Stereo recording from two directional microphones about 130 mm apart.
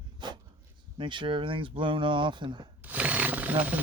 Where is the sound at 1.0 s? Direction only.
40° right (ahead or behind).